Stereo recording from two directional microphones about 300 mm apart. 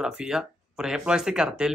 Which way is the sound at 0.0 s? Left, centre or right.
Centre.